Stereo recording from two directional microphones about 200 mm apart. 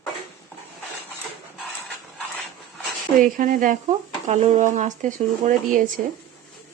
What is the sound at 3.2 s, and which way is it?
Speech, 40° right (ahead or behind).